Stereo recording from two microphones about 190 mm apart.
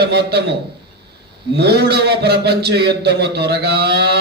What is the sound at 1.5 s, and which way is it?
A man's voice, 60° right (ahead or behind).